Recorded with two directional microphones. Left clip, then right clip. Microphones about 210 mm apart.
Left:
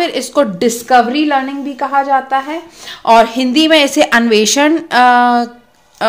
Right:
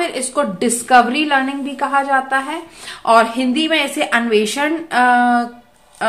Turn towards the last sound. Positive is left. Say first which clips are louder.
# left 5 dB
turn(degrees=40)  # may be behind; listen again after turning